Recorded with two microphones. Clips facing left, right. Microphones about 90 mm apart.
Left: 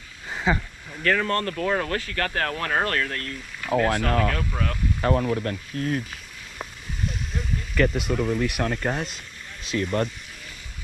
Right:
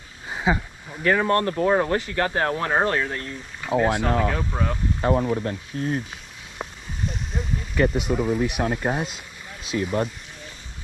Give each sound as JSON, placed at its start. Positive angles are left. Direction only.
{"t": 0.3, "sound": "speech", "side_deg": -10}
{"t": 6.6, "sound": "a sound", "side_deg": 0}
{"t": 7.9, "sound": "speech", "side_deg": 0}